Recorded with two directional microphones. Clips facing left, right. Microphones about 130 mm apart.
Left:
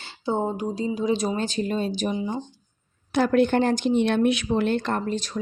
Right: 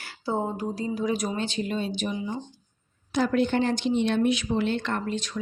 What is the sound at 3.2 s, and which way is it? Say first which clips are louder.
Speech: left 4 dB; 55° left (ahead or behind).